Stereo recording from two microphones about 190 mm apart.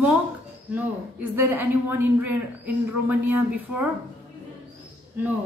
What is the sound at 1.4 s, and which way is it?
A woman's voice, 10° right (ahead or behind).